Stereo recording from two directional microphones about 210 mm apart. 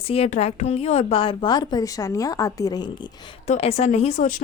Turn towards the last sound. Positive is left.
turn(degrees=35)  # may be behind; listen again after turning